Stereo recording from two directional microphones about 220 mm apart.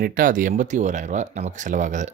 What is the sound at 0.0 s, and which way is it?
Speech, 40° right (ahead or behind).